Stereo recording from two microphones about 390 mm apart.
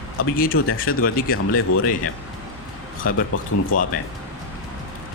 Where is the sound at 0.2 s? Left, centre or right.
Left.